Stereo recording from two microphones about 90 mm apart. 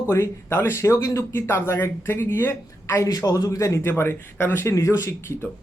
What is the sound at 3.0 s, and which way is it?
A man's voice, 45° left (ahead or behind).